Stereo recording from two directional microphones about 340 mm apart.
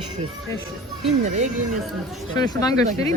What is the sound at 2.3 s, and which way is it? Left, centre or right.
Speech, centre.